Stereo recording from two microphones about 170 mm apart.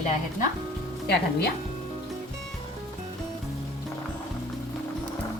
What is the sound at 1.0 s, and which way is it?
Speech, 70° left (ahead or behind).